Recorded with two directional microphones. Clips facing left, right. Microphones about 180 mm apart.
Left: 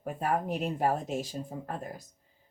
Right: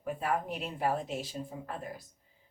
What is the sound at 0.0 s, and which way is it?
Speech, 45° left (ahead or behind).